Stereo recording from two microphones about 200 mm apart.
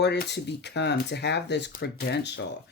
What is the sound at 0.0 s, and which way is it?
Speech, 55° left (ahead or behind).